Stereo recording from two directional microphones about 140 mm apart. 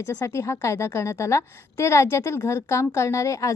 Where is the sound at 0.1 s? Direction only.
20° left (ahead or behind).